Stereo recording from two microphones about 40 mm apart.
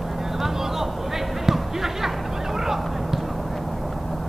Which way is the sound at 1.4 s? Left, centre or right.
Centre.